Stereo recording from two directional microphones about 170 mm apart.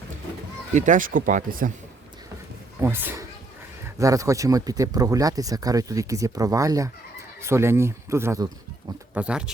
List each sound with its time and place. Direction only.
0.7 s speech: 50° right (ahead or behind)
2.8 s speech: 15° right (ahead or behind)
9.1 s speech: 5° right (ahead or behind)